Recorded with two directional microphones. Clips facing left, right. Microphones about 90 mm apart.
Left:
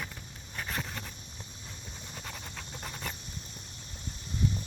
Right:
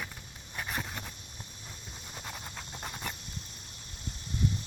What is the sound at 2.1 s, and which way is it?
Pant, 10° right (ahead or behind).